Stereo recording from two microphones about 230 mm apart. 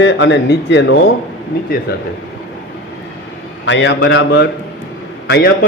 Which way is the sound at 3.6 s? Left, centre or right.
Left.